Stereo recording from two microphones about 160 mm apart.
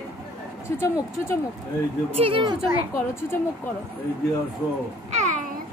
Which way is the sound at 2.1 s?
35° right (ahead or behind).